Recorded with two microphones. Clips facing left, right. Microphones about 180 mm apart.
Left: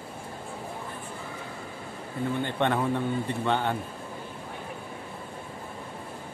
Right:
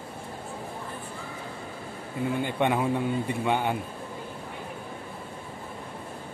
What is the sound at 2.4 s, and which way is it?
A man's voice, 10° right (ahead or behind).